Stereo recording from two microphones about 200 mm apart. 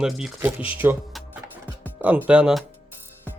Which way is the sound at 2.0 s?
10° right (ahead or behind).